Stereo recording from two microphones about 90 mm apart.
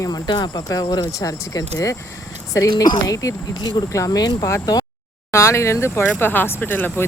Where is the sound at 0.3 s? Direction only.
55° left (ahead or behind).